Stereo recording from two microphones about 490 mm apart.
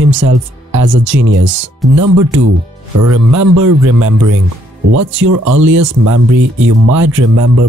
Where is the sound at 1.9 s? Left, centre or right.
Right.